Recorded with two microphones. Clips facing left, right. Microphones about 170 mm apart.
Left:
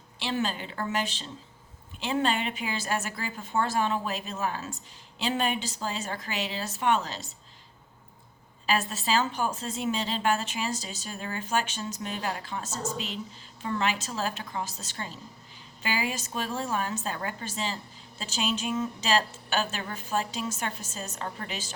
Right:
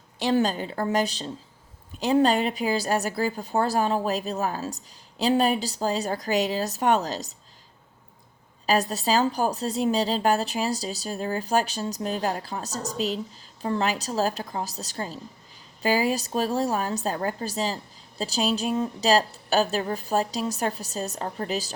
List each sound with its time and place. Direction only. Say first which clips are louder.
0.2 s speech: right 7 dB; 40° right (ahead or behind)
8.6 s speech: right 5 dB; 40° right (ahead or behind)